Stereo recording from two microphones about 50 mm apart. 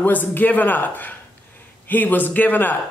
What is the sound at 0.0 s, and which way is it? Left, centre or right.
Speech, left.